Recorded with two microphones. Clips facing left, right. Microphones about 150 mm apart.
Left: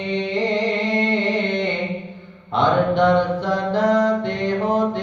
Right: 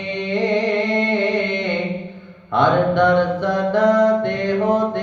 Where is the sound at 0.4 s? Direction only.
55° right (ahead or behind).